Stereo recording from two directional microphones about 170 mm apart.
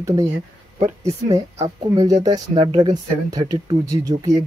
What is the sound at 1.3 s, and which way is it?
Speech, 20° right (ahead or behind).